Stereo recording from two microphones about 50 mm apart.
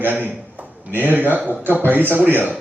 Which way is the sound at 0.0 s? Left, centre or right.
Right.